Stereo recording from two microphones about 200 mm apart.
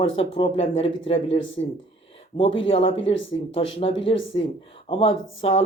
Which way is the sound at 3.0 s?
70° left (ahead or behind).